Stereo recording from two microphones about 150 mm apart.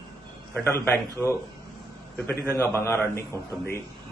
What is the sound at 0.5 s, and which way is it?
Speech, 15° left (ahead or behind).